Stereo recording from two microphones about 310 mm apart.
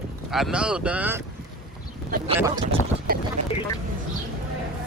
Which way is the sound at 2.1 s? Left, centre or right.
Right.